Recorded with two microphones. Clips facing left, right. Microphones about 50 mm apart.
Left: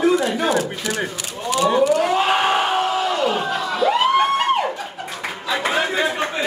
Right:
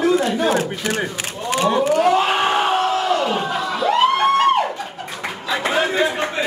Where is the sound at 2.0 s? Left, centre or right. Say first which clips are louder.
Right 2 dB; centre.